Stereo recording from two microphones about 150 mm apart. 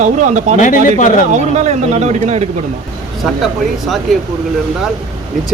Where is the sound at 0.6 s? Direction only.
55° left (ahead or behind).